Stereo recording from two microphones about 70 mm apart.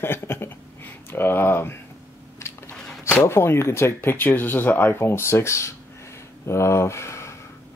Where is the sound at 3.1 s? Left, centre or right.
Left.